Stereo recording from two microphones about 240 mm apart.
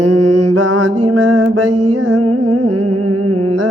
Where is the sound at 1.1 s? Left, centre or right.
Right.